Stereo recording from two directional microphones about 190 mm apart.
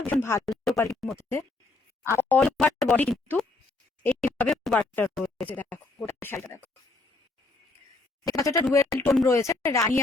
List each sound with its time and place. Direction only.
0.1 s speech: 15° left (ahead or behind)
0.4 s speech: centre (ahead or behind)
1.2 s speech: 15° left (ahead or behind)
8.3 s speech: 15° left (ahead or behind)